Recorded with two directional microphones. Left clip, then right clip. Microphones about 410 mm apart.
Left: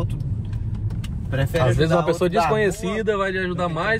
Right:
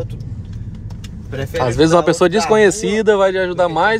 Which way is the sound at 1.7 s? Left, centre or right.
Right.